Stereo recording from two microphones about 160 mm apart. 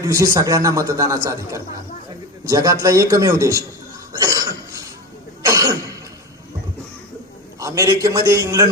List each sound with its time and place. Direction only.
0.0 s a man's voice: 20° right (ahead or behind)
4.1 s cough: 20° right (ahead or behind)
7.6 s a man's voice: 20° right (ahead or behind)